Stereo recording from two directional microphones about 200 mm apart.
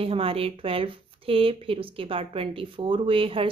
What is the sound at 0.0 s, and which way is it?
Speech, 30° right (ahead or behind).